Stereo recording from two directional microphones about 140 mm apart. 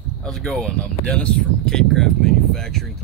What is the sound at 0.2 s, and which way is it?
Speech, 5° left (ahead or behind).